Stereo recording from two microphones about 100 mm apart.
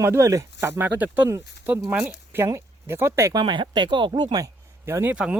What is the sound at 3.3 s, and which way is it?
Speech, 50° right (ahead or behind).